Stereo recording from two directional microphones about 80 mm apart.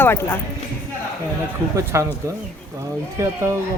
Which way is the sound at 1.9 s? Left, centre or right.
Right.